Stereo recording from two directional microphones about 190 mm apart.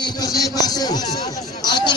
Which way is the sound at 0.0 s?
20° left (ahead or behind).